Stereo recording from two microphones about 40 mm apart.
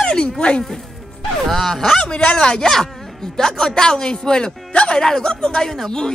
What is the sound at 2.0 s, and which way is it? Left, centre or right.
Speech, left.